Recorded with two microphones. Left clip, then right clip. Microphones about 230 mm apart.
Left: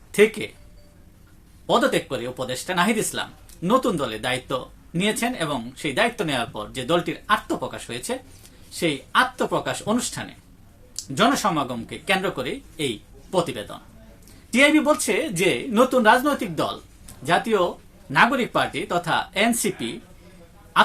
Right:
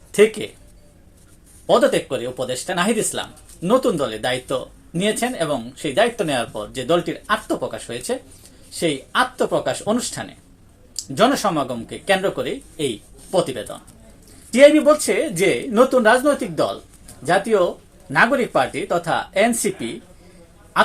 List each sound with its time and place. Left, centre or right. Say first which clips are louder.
0.1 s speech: right 3 dB; centre
1.6 s speech: right 4 dB; centre
18.1 s speech: right 2 dB; centre